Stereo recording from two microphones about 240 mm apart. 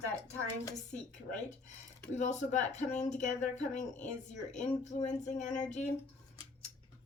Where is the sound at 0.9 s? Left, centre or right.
Left.